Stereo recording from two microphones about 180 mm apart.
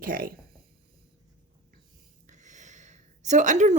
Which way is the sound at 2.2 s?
40° right (ahead or behind).